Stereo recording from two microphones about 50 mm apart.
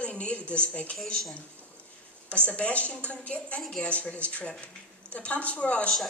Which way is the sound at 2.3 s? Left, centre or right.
Left.